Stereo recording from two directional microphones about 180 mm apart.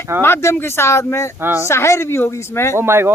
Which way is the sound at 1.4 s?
10° right (ahead or behind).